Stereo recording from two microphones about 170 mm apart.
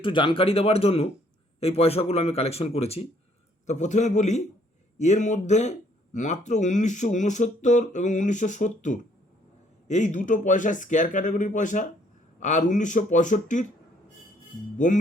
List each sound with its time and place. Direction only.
0.0 s a man's voice: 30° left (ahead or behind); by 13.7 s 45° left (ahead or behind)